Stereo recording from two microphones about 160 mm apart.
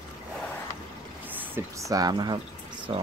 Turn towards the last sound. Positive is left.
turn(degrees=-30)  # may be behind; listen again after turning